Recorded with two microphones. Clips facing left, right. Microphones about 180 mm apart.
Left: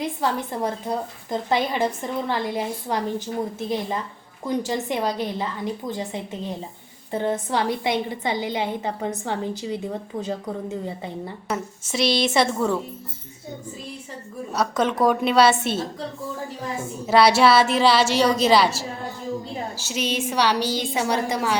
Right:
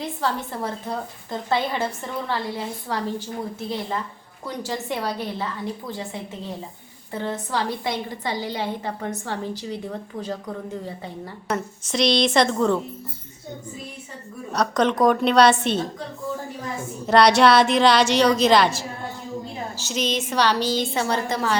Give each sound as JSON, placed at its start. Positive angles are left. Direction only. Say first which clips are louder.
{"t": 0.0, "sound": "a woman's voice", "louder": "left 2 dB", "side_deg": 15}
{"t": 4.4, "sound": "a woman's voice", "louder": "left 4 dB", "side_deg": 20}
{"t": 7.1, "sound": "a woman's voice", "louder": "left 3 dB", "side_deg": 20}
{"t": 11.4, "sound": "a woman's voice", "louder": "right 4 dB", "side_deg": 5}
{"t": 14.5, "sound": "a woman's voice", "louder": "right 2 dB", "side_deg": 5}
{"t": 17.1, "sound": "a woman's voice", "louder": "right 1 dB", "side_deg": 5}
{"t": 19.8, "sound": "a woman's voice", "louder": "right 2 dB", "side_deg": 10}